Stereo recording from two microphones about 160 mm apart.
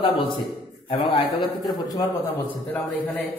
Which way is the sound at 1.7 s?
25° left (ahead or behind).